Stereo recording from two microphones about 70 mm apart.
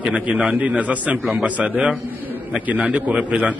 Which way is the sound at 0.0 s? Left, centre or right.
Centre.